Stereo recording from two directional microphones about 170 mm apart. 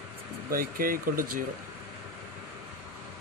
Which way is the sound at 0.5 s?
60° right (ahead or behind).